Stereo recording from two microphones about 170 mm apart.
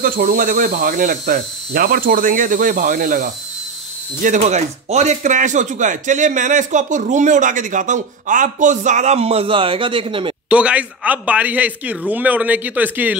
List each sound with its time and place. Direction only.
0.0 s speech: 55° right (ahead or behind); by 10.3 s 30° right (ahead or behind)
10.5 s a man's voice: 5° right (ahead or behind)